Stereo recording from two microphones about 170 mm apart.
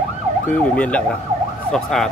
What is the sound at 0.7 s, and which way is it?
Speech, 5° left (ahead or behind).